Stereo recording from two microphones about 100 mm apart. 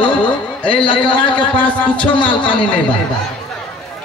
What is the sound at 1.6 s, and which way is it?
Speech, 15° left (ahead or behind).